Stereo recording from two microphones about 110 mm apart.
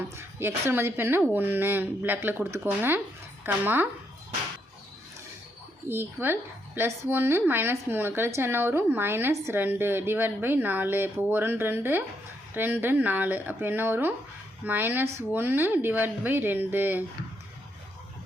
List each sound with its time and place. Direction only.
0.2 s speech: 20° right (ahead or behind)
5.9 s speech: 20° right (ahead or behind)